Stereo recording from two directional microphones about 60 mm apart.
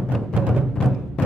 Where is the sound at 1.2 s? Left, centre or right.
Centre.